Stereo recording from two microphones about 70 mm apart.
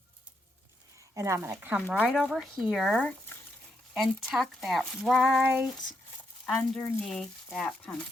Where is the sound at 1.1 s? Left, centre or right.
Right.